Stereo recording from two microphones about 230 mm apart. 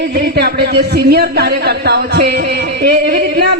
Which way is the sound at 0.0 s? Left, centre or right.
Right.